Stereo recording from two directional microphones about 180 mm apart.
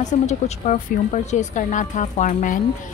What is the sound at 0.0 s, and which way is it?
A woman's voice, 40° left (ahead or behind).